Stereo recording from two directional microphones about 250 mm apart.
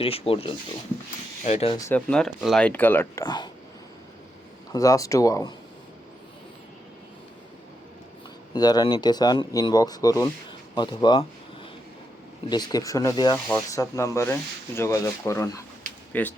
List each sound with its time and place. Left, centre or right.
0.0 s speech: left
4.7 s speech: centre
8.5 s speech: centre
12.5 s speech: centre